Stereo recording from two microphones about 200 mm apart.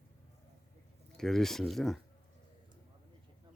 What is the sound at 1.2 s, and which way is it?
Speech, centre (ahead or behind).